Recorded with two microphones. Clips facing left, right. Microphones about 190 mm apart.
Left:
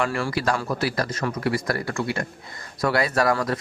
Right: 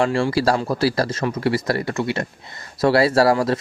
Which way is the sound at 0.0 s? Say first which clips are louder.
Right 6 dB; 30° right (ahead or behind).